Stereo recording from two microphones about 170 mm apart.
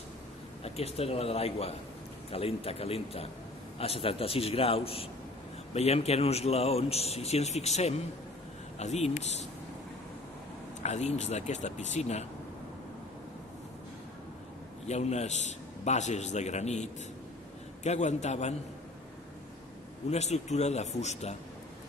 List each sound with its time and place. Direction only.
0.6 s speech: 35° left (ahead or behind)
10.8 s speech: 40° left (ahead or behind)
14.8 s a man's voice: 40° left (ahead or behind)
20.1 s speech: 40° left (ahead or behind)